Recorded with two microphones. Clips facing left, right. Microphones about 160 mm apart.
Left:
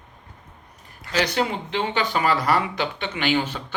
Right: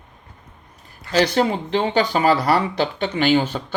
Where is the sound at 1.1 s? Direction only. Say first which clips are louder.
Right 5 dB; 40° right (ahead or behind).